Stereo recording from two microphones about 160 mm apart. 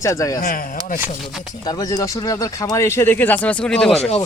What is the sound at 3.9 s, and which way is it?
Speech, 40° left (ahead or behind).